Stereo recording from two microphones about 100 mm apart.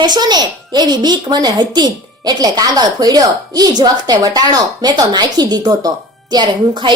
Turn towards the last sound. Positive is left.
turn(degrees=-50)  # may be behind; listen again after turning